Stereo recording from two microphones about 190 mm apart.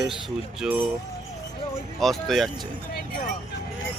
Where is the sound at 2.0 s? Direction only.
Centre (ahead or behind).